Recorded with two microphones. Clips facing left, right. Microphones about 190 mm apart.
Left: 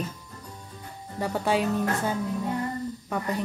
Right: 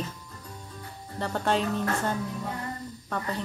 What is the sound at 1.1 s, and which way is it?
A woman's voice, 10° left (ahead or behind).